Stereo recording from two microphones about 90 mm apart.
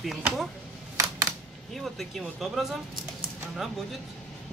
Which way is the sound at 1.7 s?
Centre (ahead or behind).